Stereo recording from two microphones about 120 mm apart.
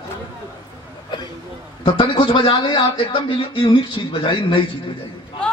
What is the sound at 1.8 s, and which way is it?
A man's voice, 45° left (ahead or behind).